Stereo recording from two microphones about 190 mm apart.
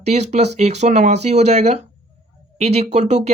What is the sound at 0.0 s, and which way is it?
Speech, 35° right (ahead or behind).